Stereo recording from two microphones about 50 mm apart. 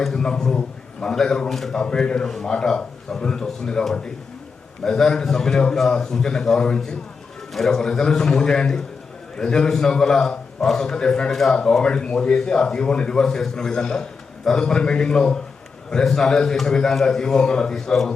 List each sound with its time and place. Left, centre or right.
0.0 s a man's voice: centre
1.8 s a man's voice: centre